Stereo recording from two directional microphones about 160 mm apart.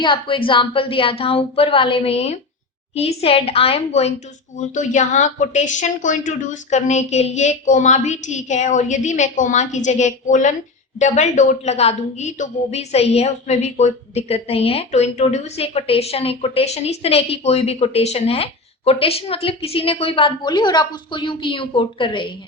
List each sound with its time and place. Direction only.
0.0 s a woman's voice: 30° left (ahead or behind)